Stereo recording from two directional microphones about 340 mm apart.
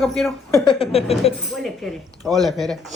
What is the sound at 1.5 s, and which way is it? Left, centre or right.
Speech, centre.